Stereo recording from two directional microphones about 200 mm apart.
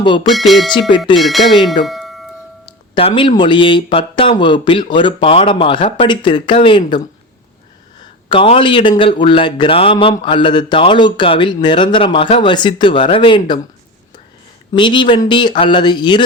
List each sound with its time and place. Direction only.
0.0 s speech: 25° left (ahead or behind)
0.3 s speech: centre (ahead or behind)
0.7 s speech: 25° left (ahead or behind)
1.1 s speech: centre (ahead or behind)
1.6 s music: centre (ahead or behind)
3.2 s speech: 25° left (ahead or behind)
8.3 s speech: 25° left (ahead or behind)
14.7 s speech: 25° left (ahead or behind)